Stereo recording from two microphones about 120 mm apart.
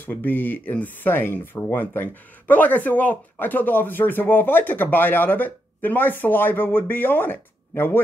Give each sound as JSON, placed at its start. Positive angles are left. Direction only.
{"t": 0.0, "sound": "speech", "side_deg": 15}